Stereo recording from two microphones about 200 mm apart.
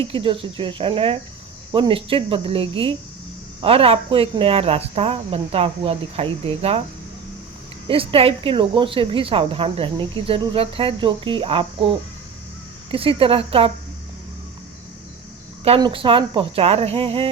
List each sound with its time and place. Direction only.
0.0 s speech: 25° right (ahead or behind)
7.9 s speech: 25° right (ahead or behind)
15.6 s speech: 30° right (ahead or behind)